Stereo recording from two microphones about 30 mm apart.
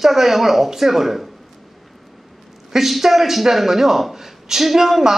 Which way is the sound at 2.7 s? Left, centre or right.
Centre.